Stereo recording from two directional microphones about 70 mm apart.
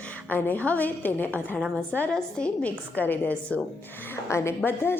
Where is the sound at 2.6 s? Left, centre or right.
Left.